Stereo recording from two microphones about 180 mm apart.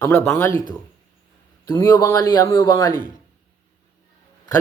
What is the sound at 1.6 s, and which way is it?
Speech, 20° left (ahead or behind).